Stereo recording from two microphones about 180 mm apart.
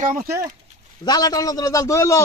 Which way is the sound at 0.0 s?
50° right (ahead or behind).